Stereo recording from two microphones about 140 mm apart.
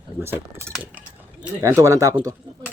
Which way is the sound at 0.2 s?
15° right (ahead or behind).